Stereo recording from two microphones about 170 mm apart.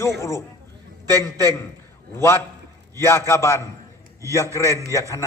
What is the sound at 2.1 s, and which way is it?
A man's voice, 15° left (ahead or behind).